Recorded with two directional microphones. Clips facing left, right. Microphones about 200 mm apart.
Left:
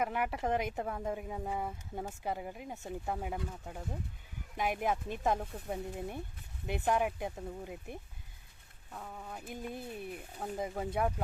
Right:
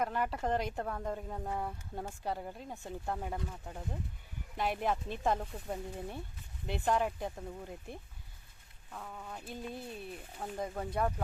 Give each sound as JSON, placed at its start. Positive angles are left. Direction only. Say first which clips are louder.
{"t": 0.0, "sound": "speech", "louder": "even", "side_deg": 10}
{"t": 5.2, "sound": "speech", "louder": "even", "side_deg": 5}